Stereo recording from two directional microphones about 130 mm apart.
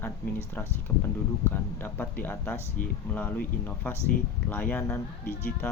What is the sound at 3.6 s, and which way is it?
Speech, 15° left (ahead or behind).